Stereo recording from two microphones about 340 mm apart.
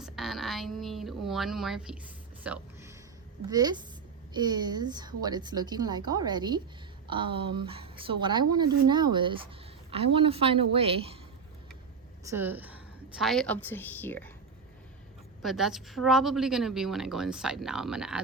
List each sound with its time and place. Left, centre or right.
0.0 s a sound: centre
3.4 s a woman's voice: centre
12.2 s a woman's voice: centre
15.4 s a woman's voice: centre